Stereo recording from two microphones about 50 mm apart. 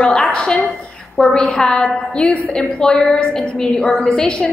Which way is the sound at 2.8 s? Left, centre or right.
Centre.